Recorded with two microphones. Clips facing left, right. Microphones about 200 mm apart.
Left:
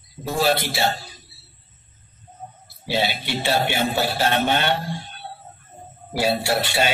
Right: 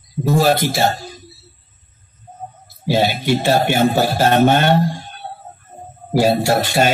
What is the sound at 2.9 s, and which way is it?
A man's voice, 45° right (ahead or behind).